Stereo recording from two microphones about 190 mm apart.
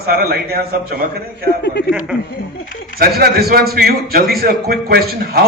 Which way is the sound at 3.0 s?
55° right (ahead or behind).